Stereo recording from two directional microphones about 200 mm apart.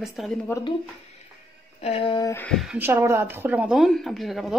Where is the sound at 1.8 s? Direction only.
30° left (ahead or behind).